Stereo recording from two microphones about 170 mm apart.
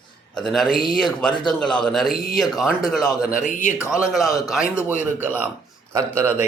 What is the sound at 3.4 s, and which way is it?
Speech, 45° left (ahead or behind).